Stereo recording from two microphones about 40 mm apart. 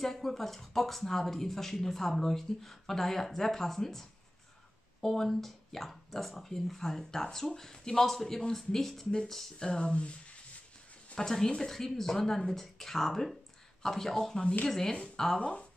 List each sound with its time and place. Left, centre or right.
0.0 s speech: centre
9.6 s speech: left
11.1 s speech: centre
15.3 s speech: left